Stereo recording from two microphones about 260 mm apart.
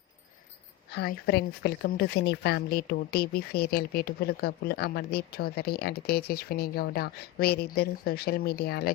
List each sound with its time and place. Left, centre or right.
0.9 s speech: left